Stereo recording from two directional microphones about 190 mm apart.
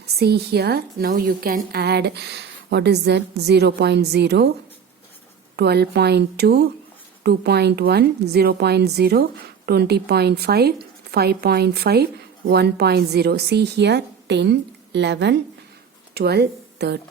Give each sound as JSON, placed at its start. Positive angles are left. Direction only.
{"t": 0.2, "sound": "a woman's voice", "side_deg": -60}
{"t": 5.5, "sound": "a woman's voice", "side_deg": -55}